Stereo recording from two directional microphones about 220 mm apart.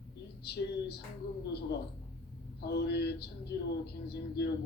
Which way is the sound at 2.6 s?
50° left (ahead or behind).